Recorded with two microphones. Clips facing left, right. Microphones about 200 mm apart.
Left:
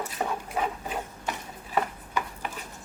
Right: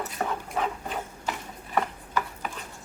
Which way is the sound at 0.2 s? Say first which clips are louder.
Even; 5° left (ahead or behind).